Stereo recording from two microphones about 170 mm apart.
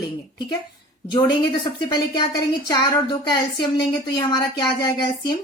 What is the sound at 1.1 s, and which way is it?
A woman's voice, 25° left (ahead or behind).